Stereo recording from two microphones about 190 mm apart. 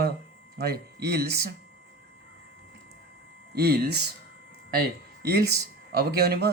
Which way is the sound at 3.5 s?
55° right (ahead or behind).